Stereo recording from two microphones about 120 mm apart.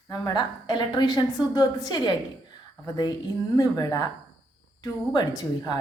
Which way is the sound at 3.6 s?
30° left (ahead or behind).